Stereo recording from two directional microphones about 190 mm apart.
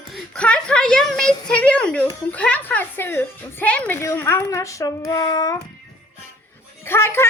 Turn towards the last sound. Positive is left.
turn(degrees=15)  # may be behind; listen again after turning